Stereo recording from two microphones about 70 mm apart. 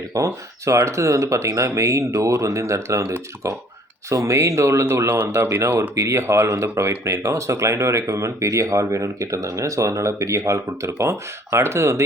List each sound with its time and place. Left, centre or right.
0.3 s speech: right